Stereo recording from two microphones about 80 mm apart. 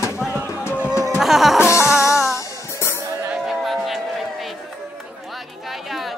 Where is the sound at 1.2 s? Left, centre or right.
Centre.